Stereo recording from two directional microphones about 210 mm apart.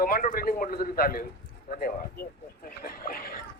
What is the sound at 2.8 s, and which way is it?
Speech, 45° left (ahead or behind).